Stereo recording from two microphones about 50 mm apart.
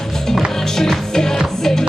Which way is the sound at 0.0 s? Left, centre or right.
Centre.